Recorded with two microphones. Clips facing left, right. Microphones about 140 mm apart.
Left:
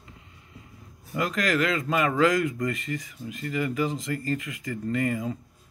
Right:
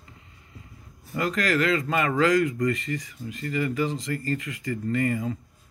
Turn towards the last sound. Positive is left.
turn(degrees=5)  # may be behind; listen again after turning